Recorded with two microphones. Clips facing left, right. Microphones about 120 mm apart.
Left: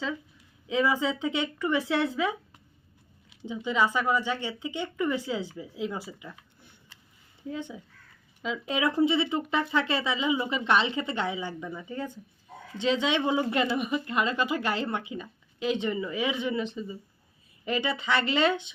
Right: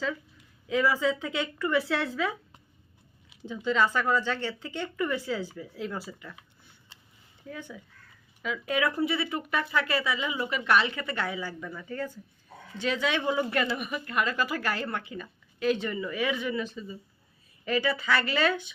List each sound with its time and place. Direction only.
0.7 s speech: 20° left (ahead or behind)
3.4 s speech: 15° left (ahead or behind)
7.5 s speech: 20° left (ahead or behind)